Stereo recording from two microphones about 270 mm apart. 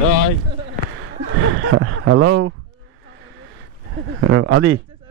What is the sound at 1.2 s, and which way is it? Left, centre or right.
Speech, right.